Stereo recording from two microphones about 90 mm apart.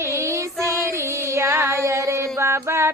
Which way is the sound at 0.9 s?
30° right (ahead or behind).